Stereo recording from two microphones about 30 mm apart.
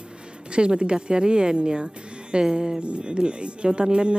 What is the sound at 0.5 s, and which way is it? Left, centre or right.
Speech, right.